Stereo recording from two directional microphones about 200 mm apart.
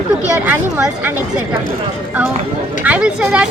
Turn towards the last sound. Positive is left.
turn(degrees=-5)  # may be behind; listen again after turning